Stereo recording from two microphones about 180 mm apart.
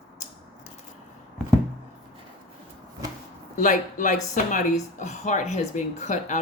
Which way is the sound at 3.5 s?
45° left (ahead or behind).